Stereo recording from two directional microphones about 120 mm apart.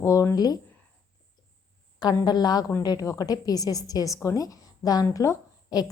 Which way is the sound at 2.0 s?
35° left (ahead or behind).